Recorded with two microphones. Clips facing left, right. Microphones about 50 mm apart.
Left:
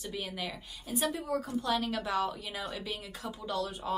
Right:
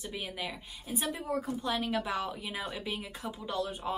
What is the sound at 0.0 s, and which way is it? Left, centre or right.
A woman's voice, centre.